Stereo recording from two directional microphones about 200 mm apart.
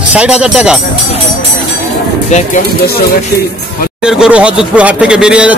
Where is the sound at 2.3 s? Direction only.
35° left (ahead or behind).